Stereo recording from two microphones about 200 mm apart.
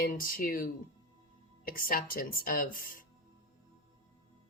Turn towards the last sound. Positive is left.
turn(degrees=45)  # may be behind; listen again after turning